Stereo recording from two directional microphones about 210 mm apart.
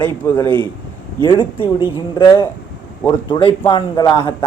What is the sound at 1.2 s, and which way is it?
Speech, 25° left (ahead or behind).